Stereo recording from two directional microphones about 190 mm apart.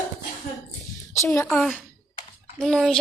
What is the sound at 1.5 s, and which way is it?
Speech, centre (ahead or behind).